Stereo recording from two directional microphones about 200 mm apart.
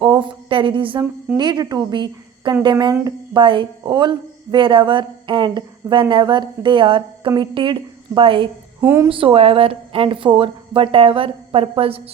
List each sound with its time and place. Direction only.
0.0 s a sound: 25° right (ahead or behind)
1.4 s speech: 20° right (ahead or behind)
8.8 s a woman's voice: 10° right (ahead or behind)
9.0 s speech: 25° right (ahead or behind)